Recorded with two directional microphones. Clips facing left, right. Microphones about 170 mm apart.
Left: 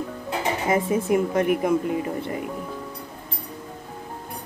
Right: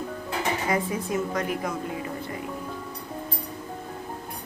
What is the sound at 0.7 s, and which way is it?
Speech, 25° left (ahead or behind).